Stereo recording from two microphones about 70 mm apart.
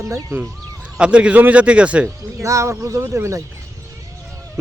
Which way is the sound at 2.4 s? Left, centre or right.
Right.